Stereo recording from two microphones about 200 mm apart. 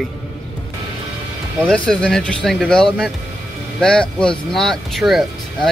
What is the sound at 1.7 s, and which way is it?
Speech, 5° left (ahead or behind).